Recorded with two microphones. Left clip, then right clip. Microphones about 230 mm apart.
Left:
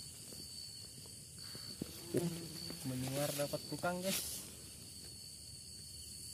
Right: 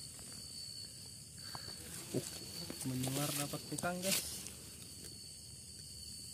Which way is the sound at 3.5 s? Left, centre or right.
Left.